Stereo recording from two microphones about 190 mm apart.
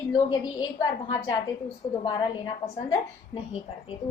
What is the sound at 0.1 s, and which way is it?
A woman's voice, 25° left (ahead or behind).